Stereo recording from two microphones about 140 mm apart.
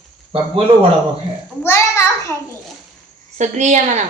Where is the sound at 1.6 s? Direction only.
20° left (ahead or behind).